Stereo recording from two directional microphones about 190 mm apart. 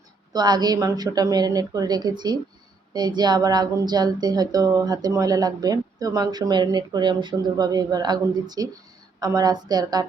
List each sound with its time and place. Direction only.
0.3 s a woman's voice: 20° right (ahead or behind)